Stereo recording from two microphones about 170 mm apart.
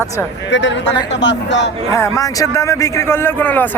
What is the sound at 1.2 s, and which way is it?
Speech, 90° left.